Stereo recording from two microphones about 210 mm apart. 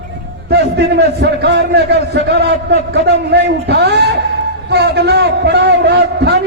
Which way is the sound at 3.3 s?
55° right (ahead or behind).